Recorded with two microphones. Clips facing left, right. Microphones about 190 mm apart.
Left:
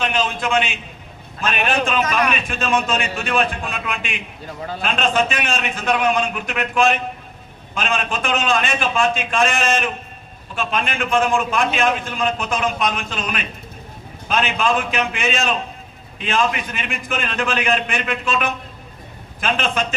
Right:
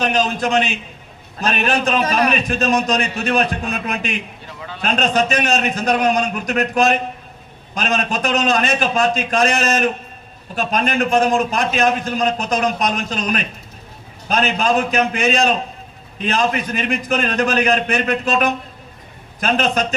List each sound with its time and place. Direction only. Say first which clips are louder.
0.0 s a man's voice: right 3 dB; 40° right (ahead or behind)
4.4 s a man's voice: left 4 dB; 40° left (ahead or behind)
4.8 s a man's voice: right 2 dB; 40° right (ahead or behind)